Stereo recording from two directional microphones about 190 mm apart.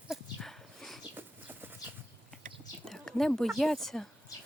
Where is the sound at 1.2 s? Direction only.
10° right (ahead or behind).